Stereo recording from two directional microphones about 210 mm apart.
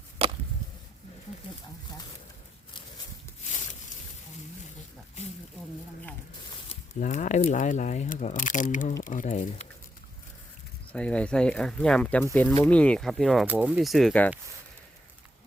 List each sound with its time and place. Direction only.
0.2 s chop: 30° right (ahead or behind)
7.0 s speech: 35° left (ahead or behind)
10.9 s speech: 5° left (ahead or behind)